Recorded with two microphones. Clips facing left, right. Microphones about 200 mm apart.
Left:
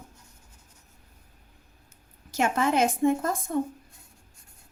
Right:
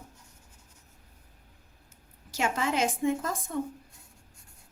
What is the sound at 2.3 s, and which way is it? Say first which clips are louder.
A woman's voice: left 5 dB; 55° left (ahead or behind).